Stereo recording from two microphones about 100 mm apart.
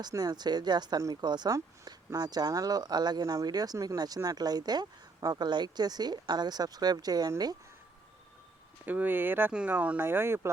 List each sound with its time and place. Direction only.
0.1 s speech: 40° right (ahead or behind)
1.5 s speech: 35° right (ahead or behind)
8.9 s speech: 20° right (ahead or behind)